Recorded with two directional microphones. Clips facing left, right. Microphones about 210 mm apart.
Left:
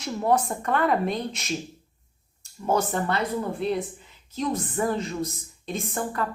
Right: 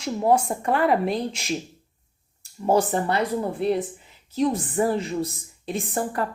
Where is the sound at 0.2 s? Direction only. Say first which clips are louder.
Right 2 dB; 25° right (ahead or behind).